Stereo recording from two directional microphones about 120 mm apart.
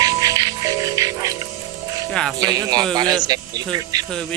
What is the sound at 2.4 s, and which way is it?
Speech, 30° right (ahead or behind).